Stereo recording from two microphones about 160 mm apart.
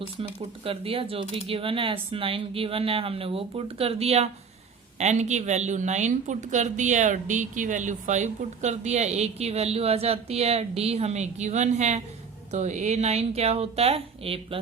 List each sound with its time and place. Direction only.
0.2 s speech: 35° right (ahead or behind)